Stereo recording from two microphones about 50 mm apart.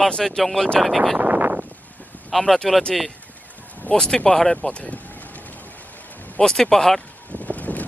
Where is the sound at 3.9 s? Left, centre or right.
Centre.